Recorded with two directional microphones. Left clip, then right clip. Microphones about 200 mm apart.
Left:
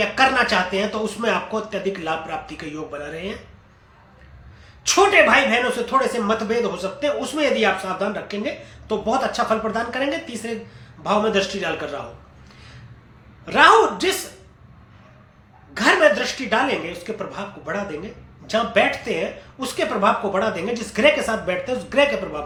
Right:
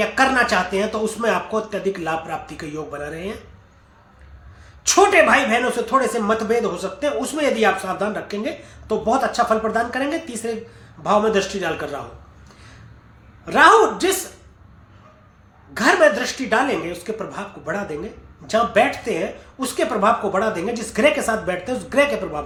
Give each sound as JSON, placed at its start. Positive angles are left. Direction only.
{"t": 0.0, "sound": "speech", "side_deg": -15}
{"t": 4.8, "sound": "speech", "side_deg": -15}
{"t": 13.4, "sound": "speech", "side_deg": -15}
{"t": 15.7, "sound": "speech", "side_deg": -15}